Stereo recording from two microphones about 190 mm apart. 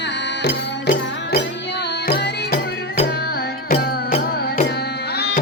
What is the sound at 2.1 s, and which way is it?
Music, 55° left (ahead or behind).